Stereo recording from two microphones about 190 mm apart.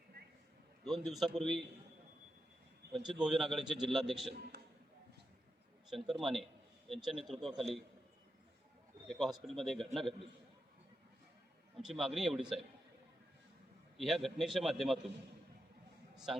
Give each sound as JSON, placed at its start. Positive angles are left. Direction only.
{"t": 0.9, "sound": "a man's voice", "side_deg": 0}
{"t": 3.1, "sound": "a man's voice", "side_deg": -5}
{"t": 5.9, "sound": "a man's voice", "side_deg": 0}
{"t": 9.0, "sound": "a man's voice", "side_deg": 0}
{"t": 11.8, "sound": "a man's voice", "side_deg": 0}
{"t": 13.9, "sound": "a man's voice", "side_deg": 0}
{"t": 16.1, "sound": "a man's voice", "side_deg": 0}